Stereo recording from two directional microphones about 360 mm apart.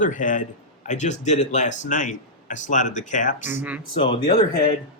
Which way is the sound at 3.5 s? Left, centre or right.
Centre.